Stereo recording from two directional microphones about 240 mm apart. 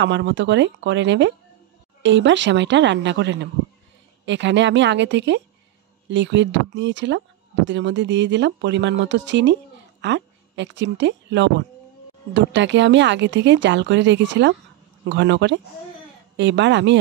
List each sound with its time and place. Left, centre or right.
0.0 s a woman's voice: right